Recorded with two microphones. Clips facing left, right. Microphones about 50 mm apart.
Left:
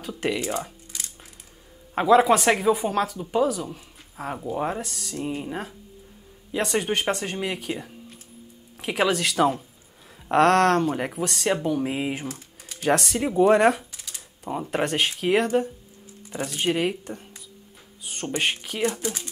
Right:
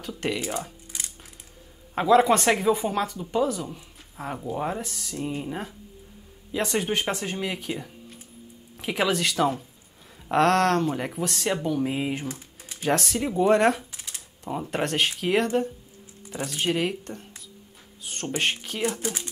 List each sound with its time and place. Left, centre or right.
0.1 s speech: centre
2.0 s speech: centre
12.3 s typing: right
12.8 s speech: centre
13.9 s a sound: right
14.4 s speech: centre